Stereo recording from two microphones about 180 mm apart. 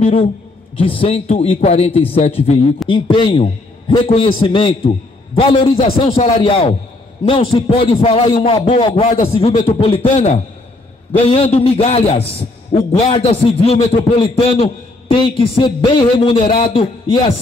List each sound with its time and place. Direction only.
0.0 s a man's voice: 30° left (ahead or behind)
13.0 s a man's voice: 30° left (ahead or behind)